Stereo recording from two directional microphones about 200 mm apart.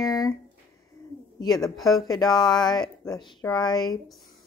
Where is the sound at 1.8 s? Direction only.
Centre (ahead or behind).